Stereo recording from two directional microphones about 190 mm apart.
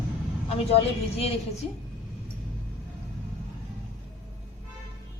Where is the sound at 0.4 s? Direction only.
30° left (ahead or behind).